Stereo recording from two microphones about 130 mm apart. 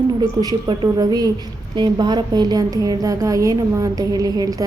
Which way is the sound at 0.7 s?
30° right (ahead or behind).